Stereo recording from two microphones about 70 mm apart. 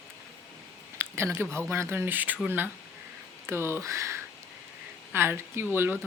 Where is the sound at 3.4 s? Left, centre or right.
Right.